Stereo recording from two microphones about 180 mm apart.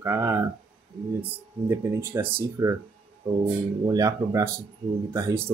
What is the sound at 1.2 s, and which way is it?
Speech, 10° right (ahead or behind).